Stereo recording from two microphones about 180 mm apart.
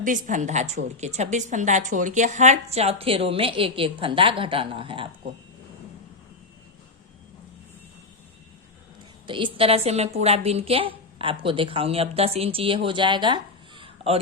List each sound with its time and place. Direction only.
0.0 s a woman's voice: 45° right (ahead or behind); by 5.0 s 30° right (ahead or behind)
9.2 s a woman's voice: 30° right (ahead or behind)